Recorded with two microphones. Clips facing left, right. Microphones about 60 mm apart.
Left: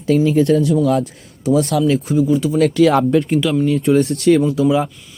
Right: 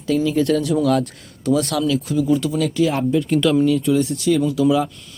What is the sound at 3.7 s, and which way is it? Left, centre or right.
Speech, left.